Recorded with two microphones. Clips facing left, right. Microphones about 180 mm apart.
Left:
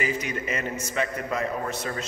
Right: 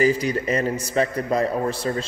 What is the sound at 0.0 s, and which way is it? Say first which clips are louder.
A man's voice: right 9 dB; 35° right (ahead or behind).